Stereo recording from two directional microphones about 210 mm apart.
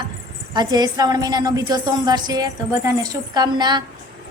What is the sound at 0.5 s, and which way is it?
A woman's voice, 20° right (ahead or behind).